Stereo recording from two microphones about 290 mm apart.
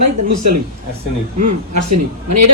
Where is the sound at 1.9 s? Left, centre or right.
Right.